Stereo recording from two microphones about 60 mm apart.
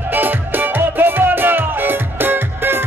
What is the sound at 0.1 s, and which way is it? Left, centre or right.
Music, right.